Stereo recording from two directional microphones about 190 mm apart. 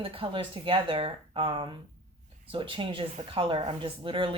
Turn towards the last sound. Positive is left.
turn(degrees=-25)  # may be behind; listen again after turning